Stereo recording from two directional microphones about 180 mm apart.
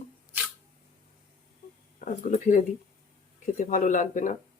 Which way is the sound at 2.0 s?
45° left (ahead or behind).